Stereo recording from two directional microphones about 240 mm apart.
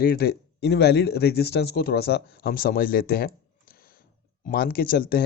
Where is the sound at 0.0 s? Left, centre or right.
Left.